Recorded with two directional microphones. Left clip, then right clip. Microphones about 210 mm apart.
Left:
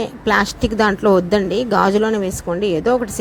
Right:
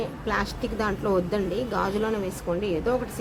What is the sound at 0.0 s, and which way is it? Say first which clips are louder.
A woman's voice: left 11 dB; 35° left (ahead or behind).